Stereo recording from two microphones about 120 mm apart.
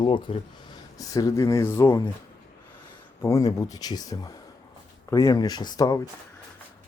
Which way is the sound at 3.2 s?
25° left (ahead or behind).